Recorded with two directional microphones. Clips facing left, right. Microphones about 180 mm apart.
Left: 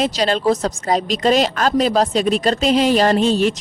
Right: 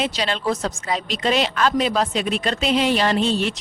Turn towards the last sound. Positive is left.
turn(degrees=40)  # may be behind; listen again after turning